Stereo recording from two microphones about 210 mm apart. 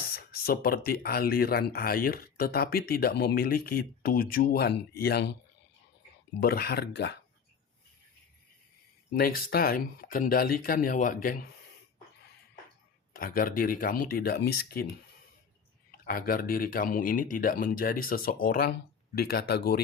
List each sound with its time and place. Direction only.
0.0 s a sound: 45° left (ahead or behind)
0.9 s speech: 50° left (ahead or behind)
6.4 s speech: 45° left (ahead or behind)
9.1 s speech: 45° left (ahead or behind)
13.1 s speech: 45° left (ahead or behind)
16.0 s speech: 45° left (ahead or behind)